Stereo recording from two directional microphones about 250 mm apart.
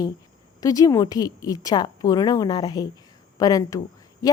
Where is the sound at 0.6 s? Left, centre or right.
Centre.